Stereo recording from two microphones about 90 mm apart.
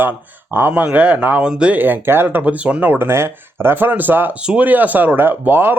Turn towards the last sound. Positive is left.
turn(degrees=-25)  # may be behind; listen again after turning